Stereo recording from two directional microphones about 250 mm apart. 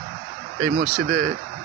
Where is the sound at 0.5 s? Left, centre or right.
Right.